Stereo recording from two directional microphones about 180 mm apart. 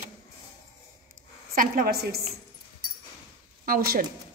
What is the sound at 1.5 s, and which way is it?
Speech, 55° right (ahead or behind).